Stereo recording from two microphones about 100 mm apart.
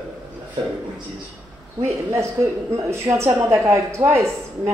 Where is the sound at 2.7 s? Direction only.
30° right (ahead or behind).